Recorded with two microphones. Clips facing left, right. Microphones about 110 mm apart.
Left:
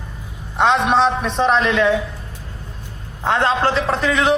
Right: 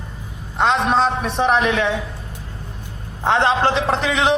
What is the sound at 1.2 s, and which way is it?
Speech, 10° right (ahead or behind).